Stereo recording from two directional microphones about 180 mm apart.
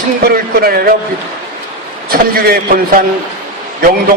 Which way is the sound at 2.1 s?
55° right (ahead or behind).